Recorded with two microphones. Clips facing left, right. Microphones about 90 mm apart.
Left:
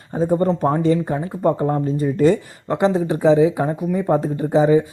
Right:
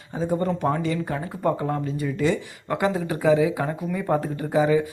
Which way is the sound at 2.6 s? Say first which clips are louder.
Left 6 dB; 25° left (ahead or behind).